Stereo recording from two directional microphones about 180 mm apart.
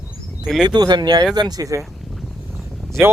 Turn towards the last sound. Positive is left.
turn(degrees=0)  # may be behind; listen again after turning